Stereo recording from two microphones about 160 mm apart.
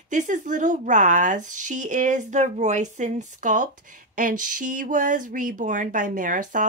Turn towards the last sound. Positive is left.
turn(degrees=-55)  # may be behind; listen again after turning